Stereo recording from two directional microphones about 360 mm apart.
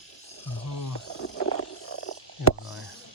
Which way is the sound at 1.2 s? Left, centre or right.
Left.